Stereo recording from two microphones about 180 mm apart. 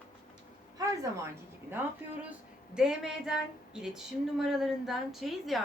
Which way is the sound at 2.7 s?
5° right (ahead or behind).